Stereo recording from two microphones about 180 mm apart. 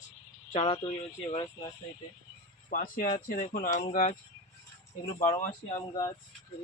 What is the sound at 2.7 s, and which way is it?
Speech, 50° left (ahead or behind).